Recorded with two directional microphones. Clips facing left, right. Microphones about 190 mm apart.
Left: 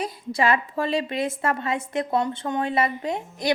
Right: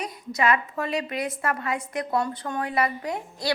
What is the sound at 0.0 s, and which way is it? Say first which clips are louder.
A woman's voice: left 2 dB; 30° left (ahead or behind).